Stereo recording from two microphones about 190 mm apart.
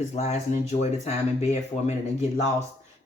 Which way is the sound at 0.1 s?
35° left (ahead or behind).